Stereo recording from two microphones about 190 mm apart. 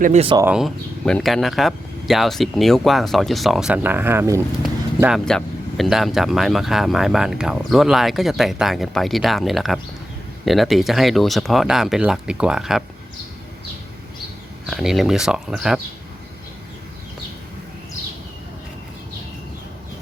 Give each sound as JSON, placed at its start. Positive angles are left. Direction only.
{"t": 0.0, "sound": "speech", "side_deg": -40}
{"t": 0.4, "sound": "speech", "side_deg": -5}
{"t": 14.7, "sound": "speech", "side_deg": 0}